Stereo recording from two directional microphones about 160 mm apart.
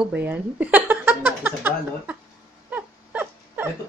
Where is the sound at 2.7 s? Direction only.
10° right (ahead or behind).